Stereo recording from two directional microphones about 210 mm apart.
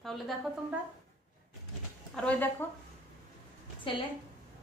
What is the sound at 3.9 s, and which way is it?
Speech, 25° left (ahead or behind).